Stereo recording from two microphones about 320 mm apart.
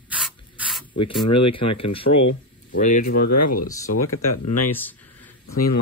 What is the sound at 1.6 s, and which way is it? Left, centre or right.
Speech, left.